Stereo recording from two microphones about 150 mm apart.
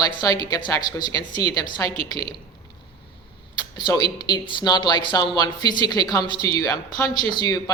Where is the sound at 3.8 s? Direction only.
30° left (ahead or behind).